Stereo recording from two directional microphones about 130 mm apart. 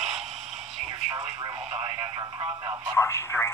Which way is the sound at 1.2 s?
55° right (ahead or behind).